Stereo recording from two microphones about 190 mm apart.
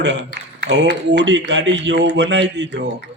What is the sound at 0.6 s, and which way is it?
A man's voice, 55° right (ahead or behind).